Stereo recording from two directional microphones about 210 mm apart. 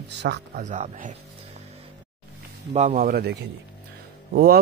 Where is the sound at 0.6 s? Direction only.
35° right (ahead or behind).